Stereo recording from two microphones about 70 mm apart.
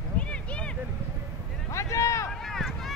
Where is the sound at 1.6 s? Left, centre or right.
Left.